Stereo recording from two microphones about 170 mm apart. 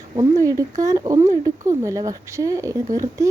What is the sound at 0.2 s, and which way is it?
Speech, 20° right (ahead or behind).